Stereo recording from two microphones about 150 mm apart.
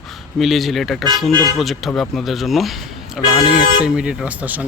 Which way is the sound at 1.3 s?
25° right (ahead or behind).